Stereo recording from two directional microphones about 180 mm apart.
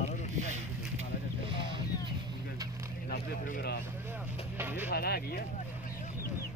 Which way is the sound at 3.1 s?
60° left (ahead or behind).